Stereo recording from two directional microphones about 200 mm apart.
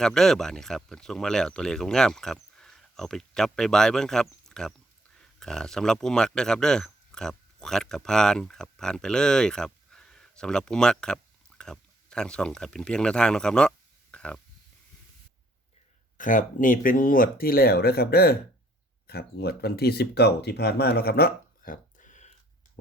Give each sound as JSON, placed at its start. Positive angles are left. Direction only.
{"t": 0.0, "sound": "speech", "side_deg": 0}
{"t": 16.1, "sound": "speech", "side_deg": 40}